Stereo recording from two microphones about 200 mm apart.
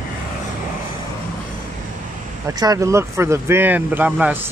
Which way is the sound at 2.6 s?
15° right (ahead or behind).